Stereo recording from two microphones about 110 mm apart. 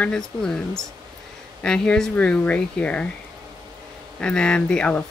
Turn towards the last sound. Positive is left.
turn(degrees=10)  # may be behind; listen again after turning